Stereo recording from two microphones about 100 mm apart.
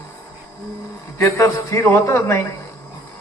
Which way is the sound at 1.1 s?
30° left (ahead or behind).